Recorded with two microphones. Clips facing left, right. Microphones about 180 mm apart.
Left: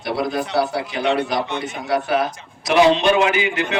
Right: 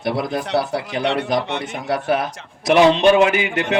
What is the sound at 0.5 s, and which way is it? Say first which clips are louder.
A man's voice: right 1 dB; 50° right (ahead or behind).